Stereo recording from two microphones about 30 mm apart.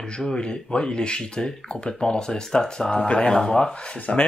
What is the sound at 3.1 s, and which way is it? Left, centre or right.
Mantra, left.